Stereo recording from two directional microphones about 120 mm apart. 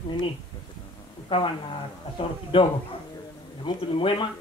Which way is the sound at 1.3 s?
45° left (ahead or behind).